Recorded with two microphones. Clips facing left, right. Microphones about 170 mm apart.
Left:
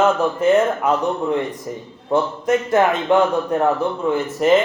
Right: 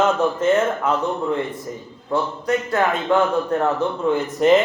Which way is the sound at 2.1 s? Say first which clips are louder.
Left 3 dB; 20° left (ahead or behind).